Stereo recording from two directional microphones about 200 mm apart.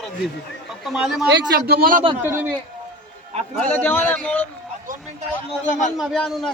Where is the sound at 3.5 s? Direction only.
10° left (ahead or behind).